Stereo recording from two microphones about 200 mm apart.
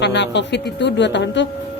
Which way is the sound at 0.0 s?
60° left (ahead or behind).